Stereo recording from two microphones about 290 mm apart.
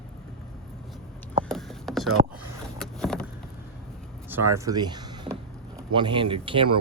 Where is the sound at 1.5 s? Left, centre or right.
Centre.